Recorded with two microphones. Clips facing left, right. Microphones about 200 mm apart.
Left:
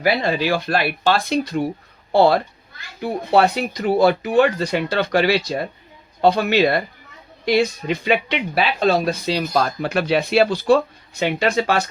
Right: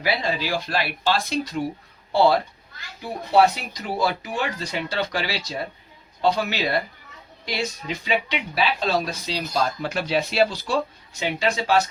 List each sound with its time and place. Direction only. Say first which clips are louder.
0.0 s speech: left 6 dB; 60° left (ahead or behind)